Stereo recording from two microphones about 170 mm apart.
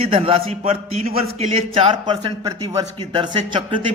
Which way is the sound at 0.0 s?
35° right (ahead or behind).